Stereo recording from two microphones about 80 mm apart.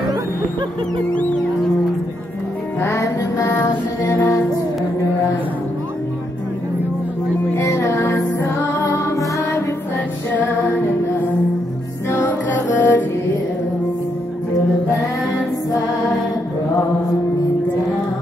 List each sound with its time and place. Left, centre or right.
2.8 s music: left
7.5 s music: left
10.3 s music: left
12.1 s music: left
12.7 s mantra: left